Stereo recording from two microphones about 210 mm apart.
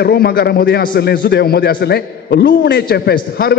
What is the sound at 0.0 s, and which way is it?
A man's voice, 50° left (ahead or behind).